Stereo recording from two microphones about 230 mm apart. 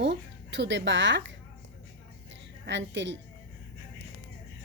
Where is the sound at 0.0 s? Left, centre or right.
Right.